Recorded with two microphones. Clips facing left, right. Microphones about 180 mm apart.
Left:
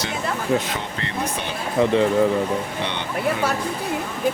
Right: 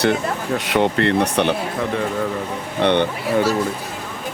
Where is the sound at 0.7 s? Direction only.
65° right (ahead or behind).